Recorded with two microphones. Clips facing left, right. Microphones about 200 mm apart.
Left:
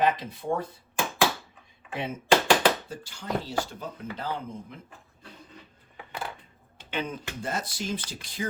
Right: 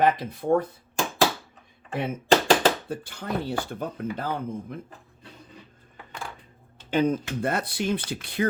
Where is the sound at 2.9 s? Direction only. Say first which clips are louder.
Right 2 dB; 55° right (ahead or behind).